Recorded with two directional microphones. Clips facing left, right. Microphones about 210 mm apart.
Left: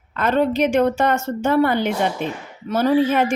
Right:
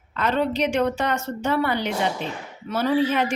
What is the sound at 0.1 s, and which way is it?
A woman's voice, 50° left (ahead or behind).